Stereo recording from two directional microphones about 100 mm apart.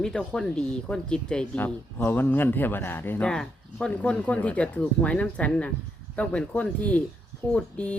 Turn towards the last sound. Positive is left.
turn(degrees=15)  # may be behind; listen again after turning